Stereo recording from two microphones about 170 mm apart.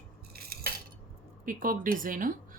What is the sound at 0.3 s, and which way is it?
Cutlery, 65° right (ahead or behind).